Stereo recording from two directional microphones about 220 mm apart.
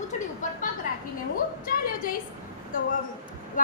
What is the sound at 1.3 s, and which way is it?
Speech, 40° left (ahead or behind).